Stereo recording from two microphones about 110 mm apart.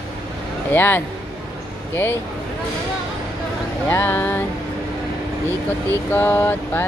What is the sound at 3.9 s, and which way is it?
Music, 20° left (ahead or behind).